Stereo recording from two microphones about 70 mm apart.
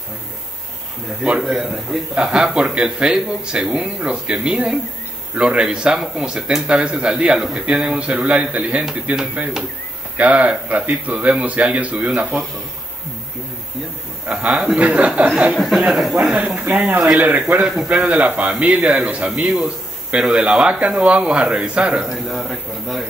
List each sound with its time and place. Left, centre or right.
1.4 s a man's voice: centre
14.3 s speech: centre
15.5 s a man's voice: centre
16.5 s speech: right; by 23.0 s centre